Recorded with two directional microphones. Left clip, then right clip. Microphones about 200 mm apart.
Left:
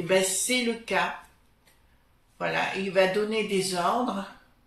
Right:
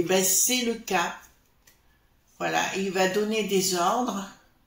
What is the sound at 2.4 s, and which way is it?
Speech, 50° right (ahead or behind).